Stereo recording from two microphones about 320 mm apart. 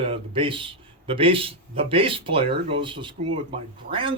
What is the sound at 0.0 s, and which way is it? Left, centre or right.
A man's voice, centre.